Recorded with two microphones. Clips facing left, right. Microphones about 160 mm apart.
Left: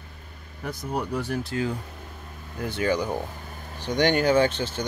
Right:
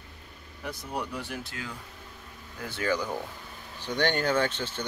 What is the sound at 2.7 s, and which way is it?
Speech, 20° left (ahead or behind).